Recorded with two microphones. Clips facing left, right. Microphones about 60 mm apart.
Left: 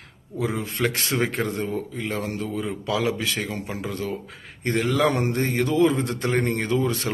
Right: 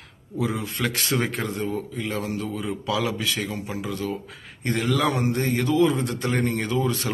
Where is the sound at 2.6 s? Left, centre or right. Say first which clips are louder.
Left 2 dB; left.